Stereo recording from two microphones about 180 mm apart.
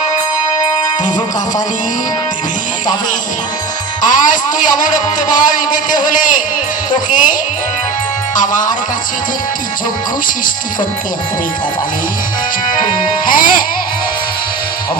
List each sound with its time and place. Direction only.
4.0 s a man's voice: 45° left (ahead or behind)
8.4 s a man's voice: 45° left (ahead or behind)
13.2 s a man's voice: 50° left (ahead or behind)